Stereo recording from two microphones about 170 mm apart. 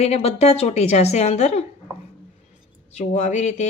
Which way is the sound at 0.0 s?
35° left (ahead or behind).